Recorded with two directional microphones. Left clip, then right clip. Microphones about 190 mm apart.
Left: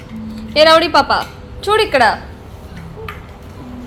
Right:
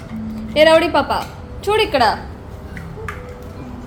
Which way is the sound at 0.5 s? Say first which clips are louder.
Left 2 dB; 15° left (ahead or behind).